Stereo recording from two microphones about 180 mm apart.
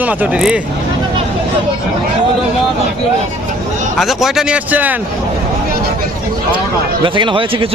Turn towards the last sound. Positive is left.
turn(degrees=-30)  # may be behind; listen again after turning